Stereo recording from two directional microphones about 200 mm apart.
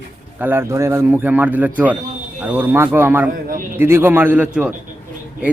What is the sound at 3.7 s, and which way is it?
Speech, 10° right (ahead or behind).